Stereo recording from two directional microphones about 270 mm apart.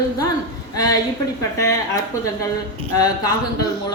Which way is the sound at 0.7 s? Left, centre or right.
Centre.